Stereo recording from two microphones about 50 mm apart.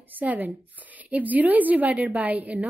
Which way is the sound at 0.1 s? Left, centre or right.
Right.